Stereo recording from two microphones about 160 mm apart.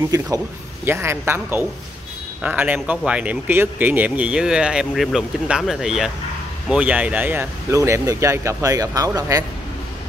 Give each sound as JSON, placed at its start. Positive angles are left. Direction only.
{"t": 0.8, "sound": "speech", "side_deg": -15}